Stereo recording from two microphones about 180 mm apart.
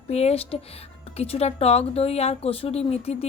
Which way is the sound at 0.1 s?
35° left (ahead or behind).